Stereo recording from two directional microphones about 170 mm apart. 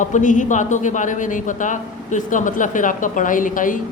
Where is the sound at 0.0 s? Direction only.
50° left (ahead or behind).